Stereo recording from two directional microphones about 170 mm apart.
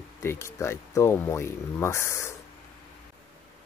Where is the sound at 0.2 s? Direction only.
15° left (ahead or behind).